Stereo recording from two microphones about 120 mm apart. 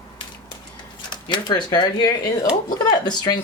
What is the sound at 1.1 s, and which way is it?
Speech, 40° left (ahead or behind).